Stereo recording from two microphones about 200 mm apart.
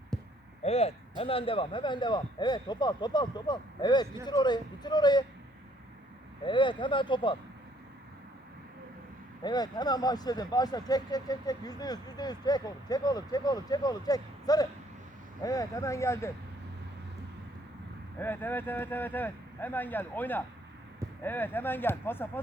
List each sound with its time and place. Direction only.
0.1 s a sound: 5° left (ahead or behind)
0.6 s speech: 30° left (ahead or behind)
6.4 s speech: 25° left (ahead or behind)
9.4 s speech: 20° left (ahead or behind)
18.2 s speech: 10° left (ahead or behind)